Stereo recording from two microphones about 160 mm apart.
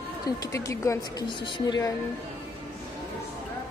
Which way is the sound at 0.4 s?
20° left (ahead or behind).